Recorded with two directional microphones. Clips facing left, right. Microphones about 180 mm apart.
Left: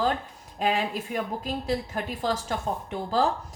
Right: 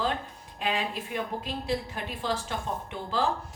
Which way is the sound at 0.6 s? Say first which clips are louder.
Left 4 dB; 40° left (ahead or behind).